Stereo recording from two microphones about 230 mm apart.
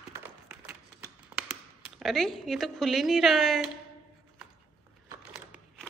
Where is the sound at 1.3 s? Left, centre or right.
Centre.